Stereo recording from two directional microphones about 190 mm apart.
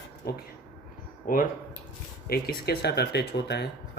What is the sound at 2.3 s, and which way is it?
Speech, 55° left (ahead or behind).